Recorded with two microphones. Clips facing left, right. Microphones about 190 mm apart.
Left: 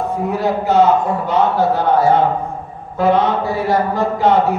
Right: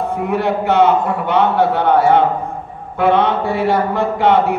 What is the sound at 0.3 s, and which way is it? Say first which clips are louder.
Speech: right 1 dB; 65° right (ahead or behind).